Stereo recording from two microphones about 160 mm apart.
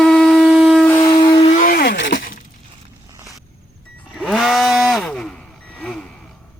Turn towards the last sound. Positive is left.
turn(degrees=5)  # may be behind; listen again after turning